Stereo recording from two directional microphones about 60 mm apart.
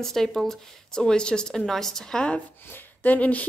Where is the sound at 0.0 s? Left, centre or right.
Centre.